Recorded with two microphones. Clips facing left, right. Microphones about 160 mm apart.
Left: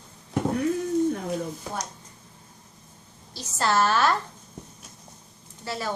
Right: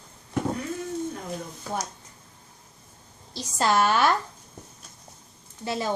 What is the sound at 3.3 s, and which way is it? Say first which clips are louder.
Speech: right 1 dB; 15° right (ahead or behind).